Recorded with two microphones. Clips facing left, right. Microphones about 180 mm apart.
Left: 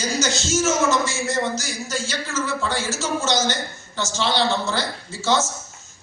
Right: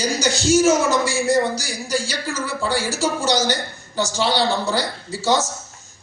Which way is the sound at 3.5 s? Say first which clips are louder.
Right 4 dB; 35° right (ahead or behind).